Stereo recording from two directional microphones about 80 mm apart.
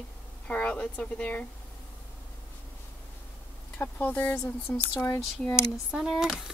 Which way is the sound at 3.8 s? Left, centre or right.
Left.